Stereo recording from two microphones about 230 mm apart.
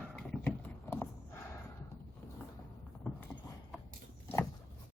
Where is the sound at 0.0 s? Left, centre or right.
Centre.